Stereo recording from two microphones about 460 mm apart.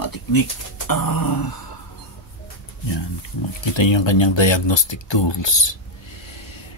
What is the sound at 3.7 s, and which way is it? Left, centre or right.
Speech, left.